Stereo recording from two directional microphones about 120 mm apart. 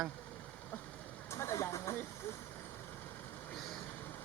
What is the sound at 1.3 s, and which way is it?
Speech, 25° left (ahead or behind).